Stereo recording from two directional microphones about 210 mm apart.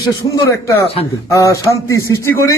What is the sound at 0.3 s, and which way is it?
A man's voice, 15° left (ahead or behind).